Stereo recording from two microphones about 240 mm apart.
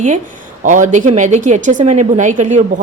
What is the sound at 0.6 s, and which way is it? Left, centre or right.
Speech, right.